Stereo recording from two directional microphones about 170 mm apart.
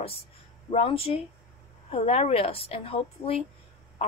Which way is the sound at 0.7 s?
35° left (ahead or behind).